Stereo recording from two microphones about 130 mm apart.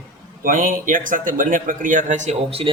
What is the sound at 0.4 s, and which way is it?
A man's voice, 90° right.